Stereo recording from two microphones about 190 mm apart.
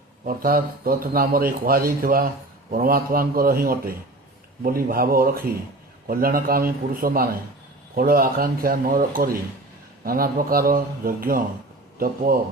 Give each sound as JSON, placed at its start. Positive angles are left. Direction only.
{"t": 0.3, "sound": "speech", "side_deg": -50}